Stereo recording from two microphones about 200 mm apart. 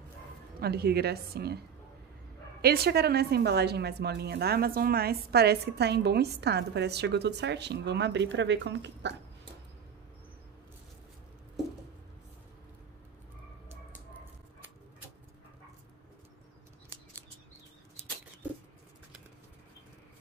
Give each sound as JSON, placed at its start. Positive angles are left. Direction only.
{"t": 0.6, "sound": "a woman's voice", "side_deg": -55}
{"t": 2.6, "sound": "a woman's voice", "side_deg": -50}